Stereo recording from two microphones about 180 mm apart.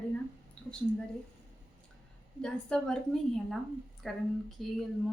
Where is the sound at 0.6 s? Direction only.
5° left (ahead or behind).